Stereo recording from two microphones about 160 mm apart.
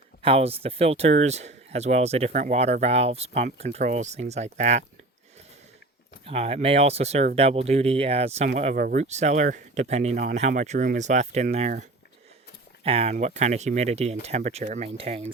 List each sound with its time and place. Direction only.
0.2 s speech: 35° right (ahead or behind)
6.2 s speech: 40° right (ahead or behind)
8.7 s speech: 60° right (ahead or behind); by 15.3 s 40° right (ahead or behind)